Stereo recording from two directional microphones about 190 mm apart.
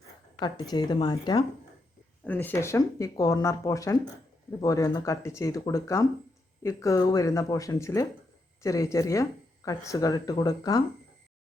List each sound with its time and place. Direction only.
0.3 s speech: 20° left (ahead or behind)
2.2 s speech: 10° left (ahead or behind)